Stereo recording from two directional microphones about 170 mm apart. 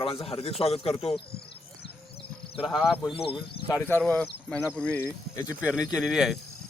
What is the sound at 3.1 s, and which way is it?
Speech, 35° left (ahead or behind).